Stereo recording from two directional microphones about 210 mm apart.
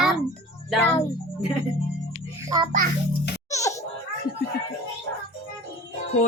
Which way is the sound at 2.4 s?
15° right (ahead or behind).